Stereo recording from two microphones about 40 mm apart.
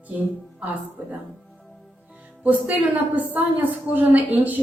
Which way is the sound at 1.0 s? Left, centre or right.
Right.